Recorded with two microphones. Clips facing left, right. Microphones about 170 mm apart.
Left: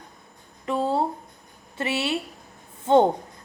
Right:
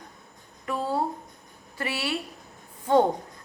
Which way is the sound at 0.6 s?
25° left (ahead or behind).